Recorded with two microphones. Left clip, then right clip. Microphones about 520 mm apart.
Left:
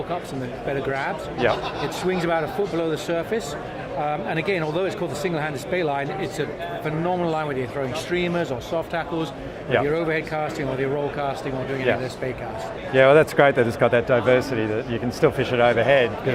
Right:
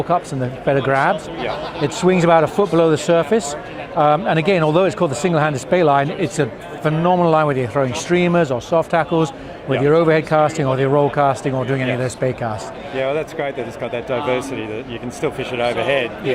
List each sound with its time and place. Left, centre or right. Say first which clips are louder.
0.7 s speech: right 10 dB; right
13.0 s a man's voice: left 6 dB; left